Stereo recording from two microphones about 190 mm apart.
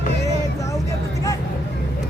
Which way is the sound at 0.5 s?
15° left (ahead or behind).